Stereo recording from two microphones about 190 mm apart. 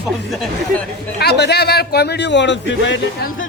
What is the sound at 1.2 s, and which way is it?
A man's voice, 60° left (ahead or behind).